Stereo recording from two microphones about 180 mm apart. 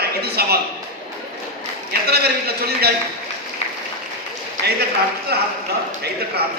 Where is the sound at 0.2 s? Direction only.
60° right (ahead or behind).